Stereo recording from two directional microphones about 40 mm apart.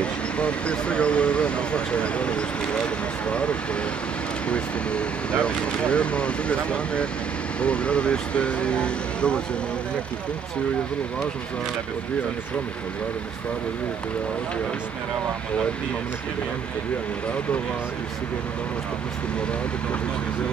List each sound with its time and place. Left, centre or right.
0.0 s speech: left